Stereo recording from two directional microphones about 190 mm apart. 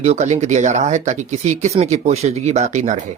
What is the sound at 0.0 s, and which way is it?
Speech, 35° right (ahead or behind).